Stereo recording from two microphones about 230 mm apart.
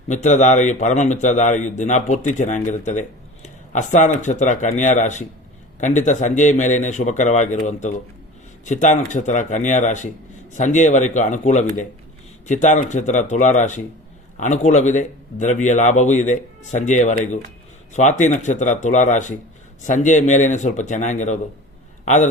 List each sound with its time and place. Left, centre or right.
0.1 s a man's voice: left